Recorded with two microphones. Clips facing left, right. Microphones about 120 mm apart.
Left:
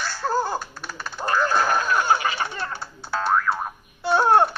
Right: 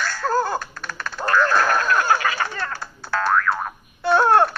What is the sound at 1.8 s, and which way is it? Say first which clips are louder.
Music: right 2 dB; 15° left (ahead or behind).